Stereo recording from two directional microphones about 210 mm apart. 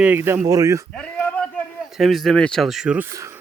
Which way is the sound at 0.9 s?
5° left (ahead or behind).